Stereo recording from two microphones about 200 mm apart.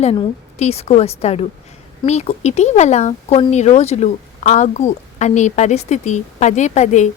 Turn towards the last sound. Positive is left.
turn(degrees=35)  # may be behind; listen again after turning